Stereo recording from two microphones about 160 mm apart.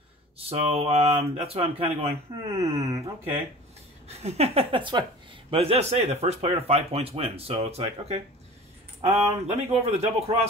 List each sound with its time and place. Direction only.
0.5 s speech: 40° right (ahead or behind)
2.5 s speech: 20° right (ahead or behind)
4.2 s speech: 40° right (ahead or behind)